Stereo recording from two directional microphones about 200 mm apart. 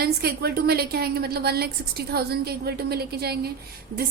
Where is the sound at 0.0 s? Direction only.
50° right (ahead or behind).